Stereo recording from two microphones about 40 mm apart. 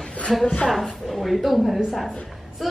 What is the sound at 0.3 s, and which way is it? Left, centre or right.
A woman's voice, centre.